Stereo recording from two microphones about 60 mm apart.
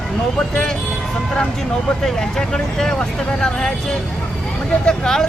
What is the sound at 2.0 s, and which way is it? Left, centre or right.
Speech, centre.